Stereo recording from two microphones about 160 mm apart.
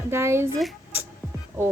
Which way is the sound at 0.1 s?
15° right (ahead or behind).